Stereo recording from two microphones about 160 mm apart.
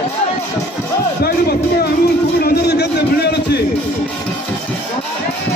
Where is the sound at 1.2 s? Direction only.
75° left (ahead or behind).